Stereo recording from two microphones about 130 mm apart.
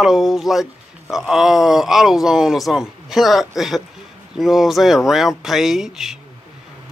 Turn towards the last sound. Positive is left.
turn(degrees=-5)  # may be behind; listen again after turning